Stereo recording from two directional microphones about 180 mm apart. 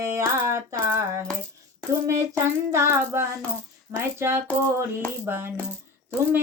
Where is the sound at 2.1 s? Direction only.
15° right (ahead or behind).